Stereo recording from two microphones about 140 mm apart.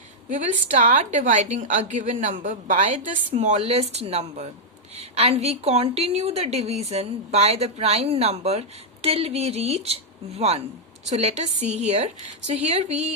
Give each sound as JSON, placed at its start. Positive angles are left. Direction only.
{"t": 0.3, "sound": "a woman's voice", "side_deg": -60}
{"t": 2.8, "sound": "a woman's voice", "side_deg": -45}